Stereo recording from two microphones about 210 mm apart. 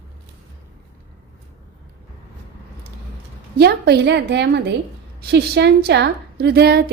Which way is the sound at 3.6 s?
50° right (ahead or behind).